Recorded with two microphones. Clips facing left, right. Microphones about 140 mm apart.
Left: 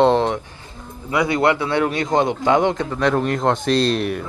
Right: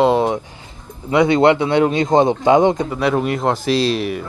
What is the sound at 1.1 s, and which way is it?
A man's voice, 25° right (ahead or behind).